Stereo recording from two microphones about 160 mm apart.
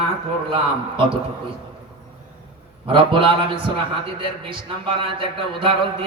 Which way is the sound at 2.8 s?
35° right (ahead or behind).